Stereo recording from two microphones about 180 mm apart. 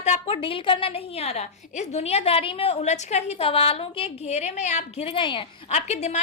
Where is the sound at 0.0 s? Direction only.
35° left (ahead or behind).